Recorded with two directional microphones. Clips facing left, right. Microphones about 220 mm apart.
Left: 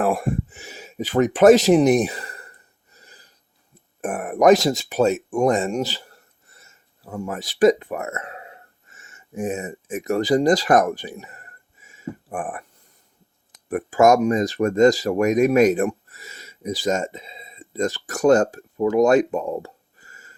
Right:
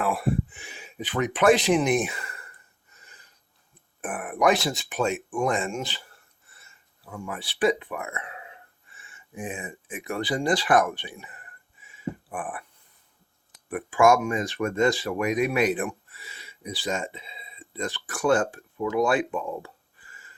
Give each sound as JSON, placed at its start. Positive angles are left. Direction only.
{"t": 0.0, "sound": "speech", "side_deg": 45}
{"t": 2.9, "sound": "filing", "side_deg": 35}
{"t": 4.0, "sound": "speech", "side_deg": 40}
{"t": 13.7, "sound": "speech", "side_deg": 40}